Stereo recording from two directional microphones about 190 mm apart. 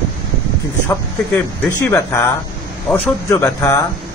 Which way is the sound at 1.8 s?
15° left (ahead or behind).